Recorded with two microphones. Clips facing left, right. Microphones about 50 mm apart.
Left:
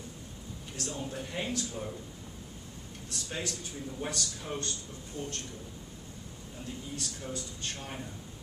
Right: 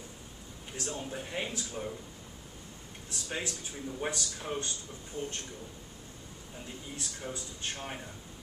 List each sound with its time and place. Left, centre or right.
0.7 s a man's voice: right
3.1 s a man's voice: right
7.0 s a man's voice: centre